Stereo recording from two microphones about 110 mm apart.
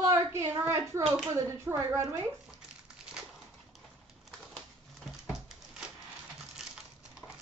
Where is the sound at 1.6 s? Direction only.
25° right (ahead or behind).